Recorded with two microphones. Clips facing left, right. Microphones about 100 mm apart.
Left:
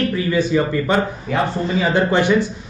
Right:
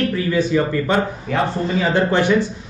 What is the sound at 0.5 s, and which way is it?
Speech, 20° left (ahead or behind).